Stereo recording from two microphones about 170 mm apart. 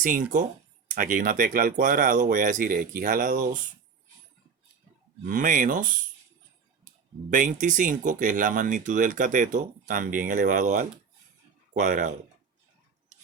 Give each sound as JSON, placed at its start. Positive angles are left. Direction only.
{"t": 0.0, "sound": "speech", "side_deg": -50}
{"t": 5.3, "sound": "speech", "side_deg": -50}
{"t": 7.3, "sound": "speech", "side_deg": -50}